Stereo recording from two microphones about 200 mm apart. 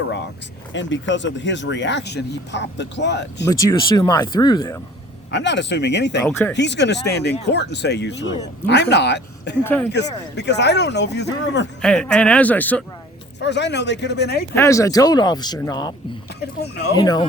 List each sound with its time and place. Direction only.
0.7 s speech: 65° left (ahead or behind)
3.4 s speech: 15° left (ahead or behind)
5.3 s speech: 60° left (ahead or behind)
9.6 s speech: 10° left (ahead or behind)
9.9 s speech: 60° left (ahead or behind)
11.8 s speech: 5° left (ahead or behind)
13.4 s speech: 60° left (ahead or behind)
14.5 s speech: 15° left (ahead or behind)
16.6 s speech: 55° left (ahead or behind)
16.9 s speech: 20° left (ahead or behind)